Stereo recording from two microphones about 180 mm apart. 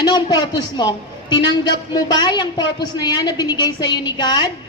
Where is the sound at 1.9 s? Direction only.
25° left (ahead or behind).